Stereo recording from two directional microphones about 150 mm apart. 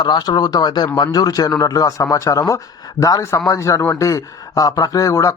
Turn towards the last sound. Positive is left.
turn(degrees=20)  # may be behind; listen again after turning